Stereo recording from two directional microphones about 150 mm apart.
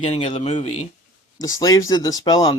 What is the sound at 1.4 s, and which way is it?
Speech, 25° left (ahead or behind).